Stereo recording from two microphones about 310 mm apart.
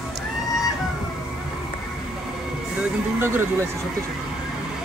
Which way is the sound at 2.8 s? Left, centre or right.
Centre.